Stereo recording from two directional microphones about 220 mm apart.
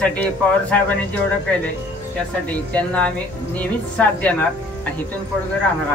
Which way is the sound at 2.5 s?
5° left (ahead or behind).